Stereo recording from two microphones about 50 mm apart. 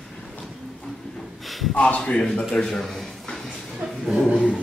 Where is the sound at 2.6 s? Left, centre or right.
Centre.